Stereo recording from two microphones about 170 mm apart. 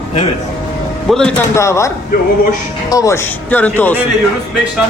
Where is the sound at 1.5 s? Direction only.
15° left (ahead or behind).